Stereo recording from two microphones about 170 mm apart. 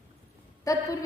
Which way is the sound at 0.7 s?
20° left (ahead or behind).